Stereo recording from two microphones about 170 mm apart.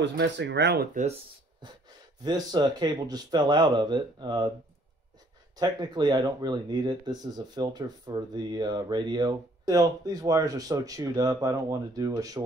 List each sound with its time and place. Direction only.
0.0 s speech: 90° right; by 0.8 s 75° right (ahead or behind)
2.2 s speech: 25° right (ahead or behind)
5.6 s speech: 25° right (ahead or behind)